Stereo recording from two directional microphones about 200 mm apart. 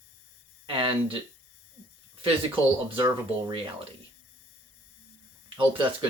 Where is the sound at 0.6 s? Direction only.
25° right (ahead or behind).